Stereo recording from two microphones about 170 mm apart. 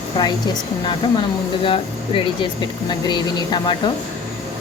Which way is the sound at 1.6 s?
30° left (ahead or behind).